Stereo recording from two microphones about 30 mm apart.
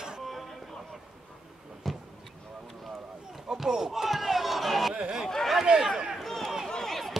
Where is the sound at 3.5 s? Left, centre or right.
Centre.